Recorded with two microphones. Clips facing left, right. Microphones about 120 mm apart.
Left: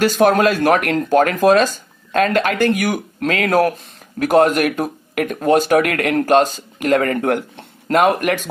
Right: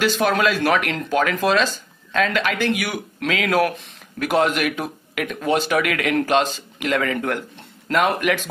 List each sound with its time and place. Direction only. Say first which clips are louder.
0.0 s speech: left 5 dB; 45° left (ahead or behind)